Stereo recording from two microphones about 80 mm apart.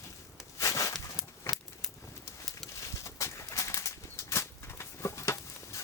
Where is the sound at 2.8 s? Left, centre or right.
Left.